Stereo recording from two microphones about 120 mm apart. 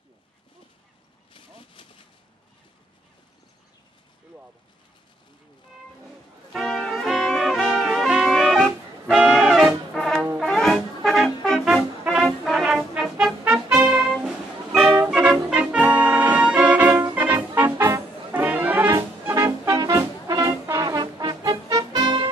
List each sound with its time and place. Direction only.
1.3 s vehicle: 50° left (ahead or behind)
6.5 s brass instrument: 5° left (ahead or behind)
13.4 s music: 10° right (ahead or behind)
15.0 s brass instrument: 10° right (ahead or behind)
18.3 s brass instrument: 10° right (ahead or behind)
19.2 s music: 20° right (ahead or behind); by 22.3 s 40° right (ahead or behind)